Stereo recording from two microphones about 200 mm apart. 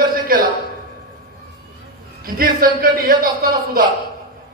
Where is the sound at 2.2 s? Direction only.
45° right (ahead or behind).